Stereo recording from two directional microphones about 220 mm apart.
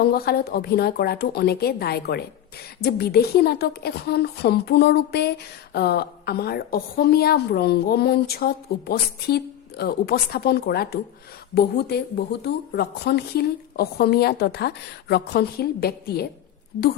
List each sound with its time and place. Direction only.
0.0 s a woman's voice: 45° left (ahead or behind)